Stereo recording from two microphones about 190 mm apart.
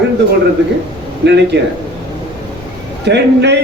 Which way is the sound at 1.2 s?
65° right (ahead or behind).